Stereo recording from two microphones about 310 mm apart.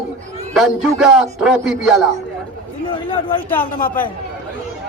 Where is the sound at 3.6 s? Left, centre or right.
Left.